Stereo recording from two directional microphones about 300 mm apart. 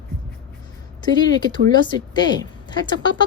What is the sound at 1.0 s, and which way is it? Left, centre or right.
A woman's voice, centre.